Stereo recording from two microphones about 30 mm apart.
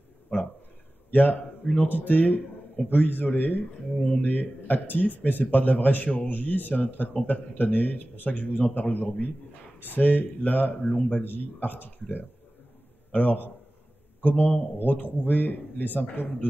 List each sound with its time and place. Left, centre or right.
0.3 s a sound: left
1.1 s speech: left
1.6 s speech: left
1.9 s a man's voice: left
6.1 s speech: left
9.8 s speech: left
10.7 s a man's voice: left
11.3 s a man's voice: left
13.1 s a man's voice: left